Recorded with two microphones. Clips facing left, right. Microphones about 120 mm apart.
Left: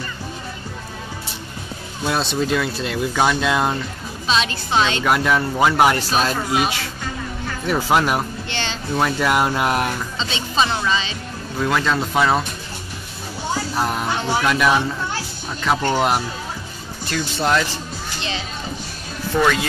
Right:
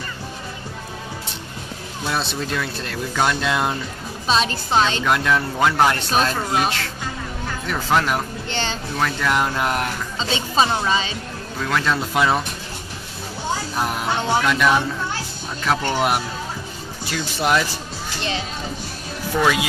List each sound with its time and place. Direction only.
2.0 s speech: centre (ahead or behind)
4.3 s a woman's voice: 40° right (ahead or behind)
5.0 s speech: 10° left (ahead or behind)
8.5 s speech: 45° right (ahead or behind)
8.9 s speech: 10° left (ahead or behind)
10.9 s speech: 50° right (ahead or behind)
11.8 s speech: centre (ahead or behind)
13.7 s speech: centre (ahead or behind)
19.3 s speech: 5° right (ahead or behind)